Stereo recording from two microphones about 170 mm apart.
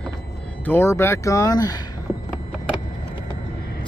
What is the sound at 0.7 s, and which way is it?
Speech, 15° left (ahead or behind).